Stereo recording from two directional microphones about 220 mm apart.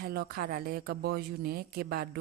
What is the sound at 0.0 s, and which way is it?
Speech, 45° right (ahead or behind).